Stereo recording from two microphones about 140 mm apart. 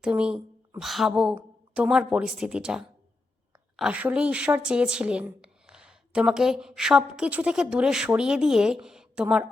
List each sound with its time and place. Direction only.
0.0 s a woman's voice: 5° right (ahead or behind)